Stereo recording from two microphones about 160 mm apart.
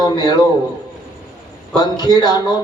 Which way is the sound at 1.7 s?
25° left (ahead or behind).